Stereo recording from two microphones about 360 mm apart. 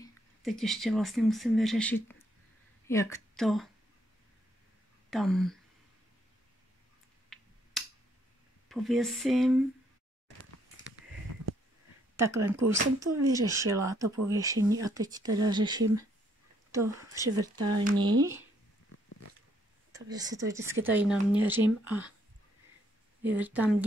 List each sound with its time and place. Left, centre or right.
0.0 s a woman's voice: centre
5.1 s speech: centre
7.3 s a sound: centre
8.6 s speech: centre
12.2 s speech: centre
14.0 s speech: right
14.3 s speech: centre
19.9 s speech: centre
23.2 s speech: centre